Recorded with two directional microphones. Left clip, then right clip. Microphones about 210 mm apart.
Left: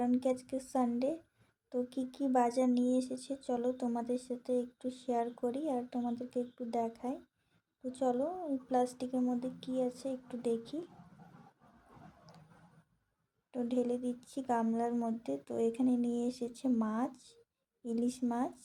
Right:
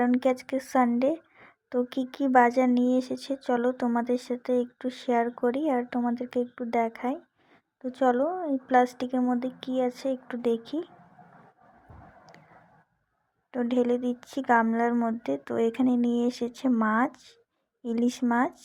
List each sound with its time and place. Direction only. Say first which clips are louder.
0.0 s a woman's voice: right 8 dB; 20° right (ahead or behind)
13.5 s a woman's voice: right 9 dB; 20° right (ahead or behind)